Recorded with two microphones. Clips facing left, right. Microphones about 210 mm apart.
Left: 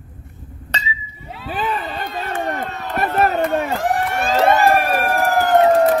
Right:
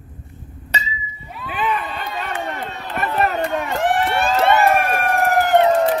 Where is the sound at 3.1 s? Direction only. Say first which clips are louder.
Left 2 dB; 50° left (ahead or behind).